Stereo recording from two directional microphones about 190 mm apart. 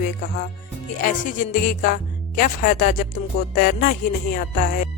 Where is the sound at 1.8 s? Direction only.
50° left (ahead or behind).